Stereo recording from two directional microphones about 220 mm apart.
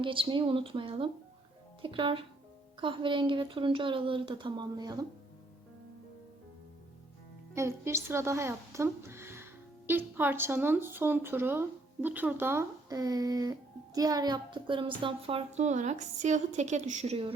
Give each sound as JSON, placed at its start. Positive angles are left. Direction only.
{"t": 0.0, "sound": "speech", "side_deg": -25}
{"t": 7.5, "sound": "a woman's voice", "side_deg": -10}